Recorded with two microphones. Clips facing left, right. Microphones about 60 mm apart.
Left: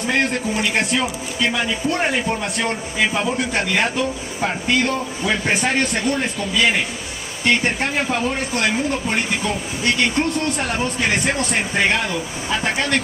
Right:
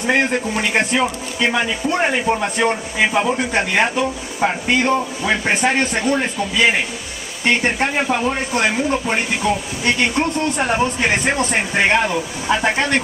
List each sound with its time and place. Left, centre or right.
0.0 s speech: right